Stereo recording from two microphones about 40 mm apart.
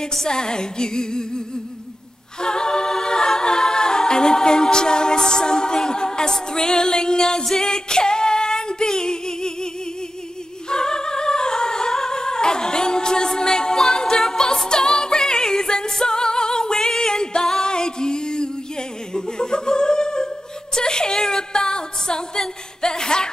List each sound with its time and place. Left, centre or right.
0.0 s music: centre
2.4 s a capella: centre
7.4 s music: centre
10.7 s music: centre